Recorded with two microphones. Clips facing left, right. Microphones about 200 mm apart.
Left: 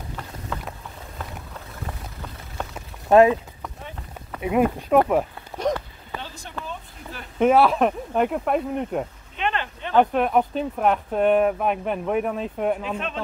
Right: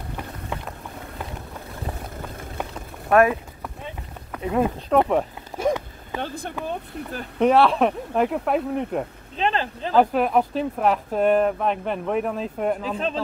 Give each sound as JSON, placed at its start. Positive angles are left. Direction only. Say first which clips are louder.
{"t": 3.1, "sound": "speech", "louder": "left 3 dB", "side_deg": 20}
{"t": 4.4, "sound": "speech", "louder": "left 2 dB", "side_deg": 15}
{"t": 5.6, "sound": "a sound", "louder": "right 2 dB", "side_deg": -10}
{"t": 6.2, "sound": "speech", "louder": "right 9 dB", "side_deg": -55}
{"t": 7.3, "sound": "speech", "louder": "even", "side_deg": 5}
{"t": 9.4, "sound": "speech", "louder": "right 3 dB", "side_deg": -35}
{"t": 9.9, "sound": "speech", "louder": "even", "side_deg": 0}
{"t": 12.9, "sound": "speech", "louder": "right 3 dB", "side_deg": -35}